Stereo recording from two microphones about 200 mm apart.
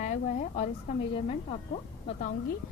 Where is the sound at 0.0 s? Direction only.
40° left (ahead or behind).